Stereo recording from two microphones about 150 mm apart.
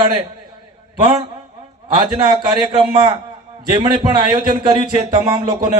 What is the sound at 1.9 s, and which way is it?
A man's voice, 30° right (ahead or behind).